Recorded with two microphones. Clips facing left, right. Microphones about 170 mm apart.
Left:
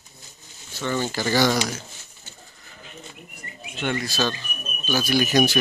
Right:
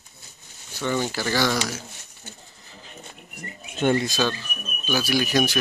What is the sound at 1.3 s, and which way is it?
Speech, 20° left (ahead or behind).